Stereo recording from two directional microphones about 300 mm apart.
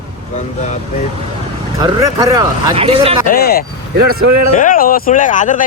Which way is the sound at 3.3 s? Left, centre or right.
Left.